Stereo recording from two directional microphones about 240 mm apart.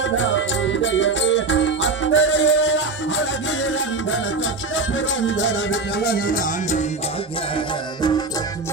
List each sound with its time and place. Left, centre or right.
0.2 s music: left
4.7 s music: left